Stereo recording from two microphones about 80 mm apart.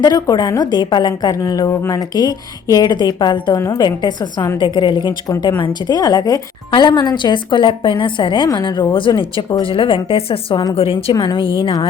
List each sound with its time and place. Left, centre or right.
0.0 s a woman's voice: left
3.8 s a woman's voice: left
4.6 s a woman's voice: left
5.4 s a woman's voice: left
6.7 s a woman's voice: left
8.4 s a woman's voice: left
10.6 s a woman's voice: left